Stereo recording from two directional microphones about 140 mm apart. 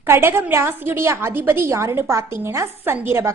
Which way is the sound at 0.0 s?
15° right (ahead or behind).